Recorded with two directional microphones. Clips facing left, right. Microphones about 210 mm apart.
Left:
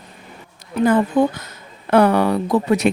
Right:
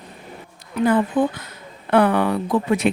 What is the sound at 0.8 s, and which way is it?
Speech, 45° left (ahead or behind).